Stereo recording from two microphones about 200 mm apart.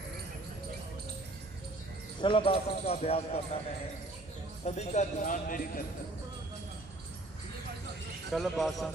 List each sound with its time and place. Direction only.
2.2 s speech: 25° left (ahead or behind)
4.6 s speech: 35° left (ahead or behind)
8.3 s speech: centre (ahead or behind)